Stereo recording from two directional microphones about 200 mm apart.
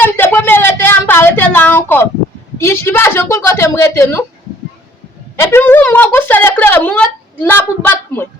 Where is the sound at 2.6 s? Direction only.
10° left (ahead or behind).